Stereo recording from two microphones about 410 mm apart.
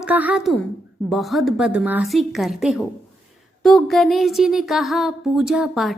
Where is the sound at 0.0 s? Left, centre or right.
Centre.